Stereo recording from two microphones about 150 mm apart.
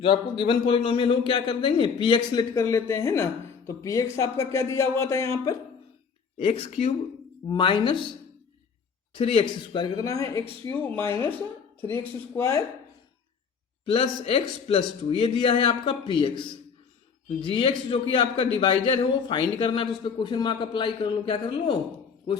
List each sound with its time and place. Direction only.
0.0 s a man's voice: 35° left (ahead or behind)
6.4 s a man's voice: 40° left (ahead or behind)
9.1 s a man's voice: 35° left (ahead or behind); by 12.6 s 20° left (ahead or behind)
13.8 s a man's voice: 40° left (ahead or behind)